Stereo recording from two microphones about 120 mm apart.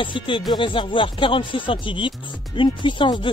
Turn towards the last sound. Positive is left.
turn(degrees=40)  # may be behind; listen again after turning